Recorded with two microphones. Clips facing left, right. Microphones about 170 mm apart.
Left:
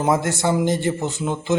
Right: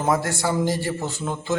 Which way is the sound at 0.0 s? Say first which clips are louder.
Left 3 dB; 20° left (ahead or behind).